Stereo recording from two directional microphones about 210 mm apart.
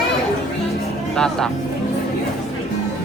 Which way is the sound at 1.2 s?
5° left (ahead or behind).